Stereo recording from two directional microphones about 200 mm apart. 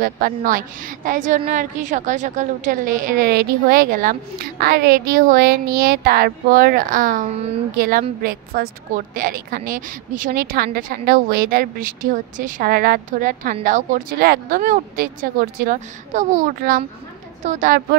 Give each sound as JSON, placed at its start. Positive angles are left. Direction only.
{"t": 0.0, "sound": "a woman's voice", "side_deg": -45}